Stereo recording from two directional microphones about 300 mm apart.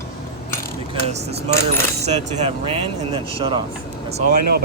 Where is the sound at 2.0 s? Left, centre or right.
Right.